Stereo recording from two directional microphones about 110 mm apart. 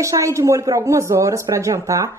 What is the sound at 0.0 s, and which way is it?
Speech, 30° right (ahead or behind).